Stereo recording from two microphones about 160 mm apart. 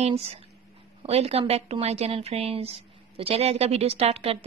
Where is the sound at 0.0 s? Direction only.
40° right (ahead or behind).